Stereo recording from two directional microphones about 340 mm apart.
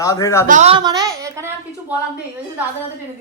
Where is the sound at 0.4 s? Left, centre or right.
Right.